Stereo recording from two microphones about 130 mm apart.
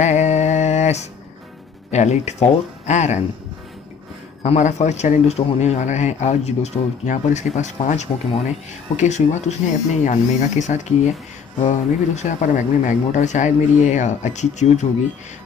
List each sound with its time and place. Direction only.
0.0 s mantra: 65° left (ahead or behind)
1.9 s speech: 60° left (ahead or behind)
4.4 s speech: 65° left (ahead or behind)